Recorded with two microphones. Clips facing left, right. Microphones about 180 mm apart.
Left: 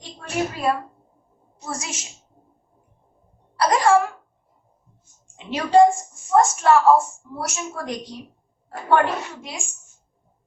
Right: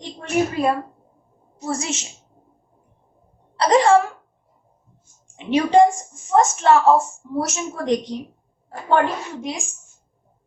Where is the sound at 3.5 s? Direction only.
25° right (ahead or behind).